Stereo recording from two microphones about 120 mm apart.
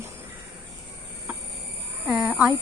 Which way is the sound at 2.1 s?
10° right (ahead or behind).